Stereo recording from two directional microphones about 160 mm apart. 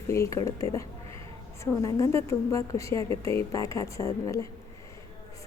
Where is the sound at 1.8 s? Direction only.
20° left (ahead or behind).